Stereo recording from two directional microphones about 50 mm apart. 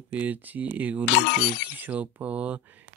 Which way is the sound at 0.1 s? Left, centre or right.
Right.